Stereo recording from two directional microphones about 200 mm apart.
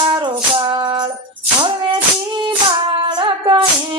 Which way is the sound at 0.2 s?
25° right (ahead or behind).